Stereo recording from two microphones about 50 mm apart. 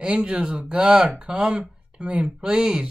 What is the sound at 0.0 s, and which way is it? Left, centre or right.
Speech, right.